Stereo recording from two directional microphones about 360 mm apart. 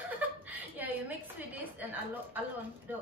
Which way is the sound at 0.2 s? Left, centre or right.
Centre.